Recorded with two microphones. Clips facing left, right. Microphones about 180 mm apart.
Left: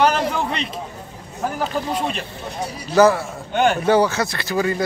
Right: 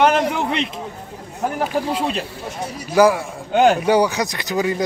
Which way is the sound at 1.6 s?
10° right (ahead or behind).